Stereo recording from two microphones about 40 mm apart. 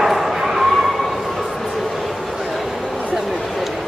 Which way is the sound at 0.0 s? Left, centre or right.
Centre.